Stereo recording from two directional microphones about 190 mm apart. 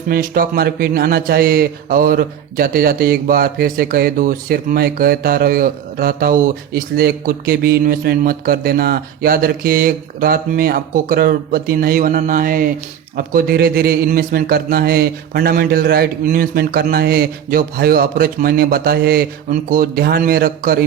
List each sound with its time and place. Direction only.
0.1 s a man's voice: 50° right (ahead or behind)